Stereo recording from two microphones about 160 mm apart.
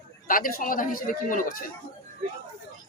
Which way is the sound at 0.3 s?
60° left (ahead or behind).